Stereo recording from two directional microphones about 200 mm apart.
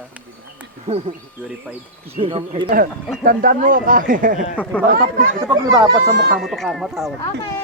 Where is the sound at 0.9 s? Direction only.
30° right (ahead or behind).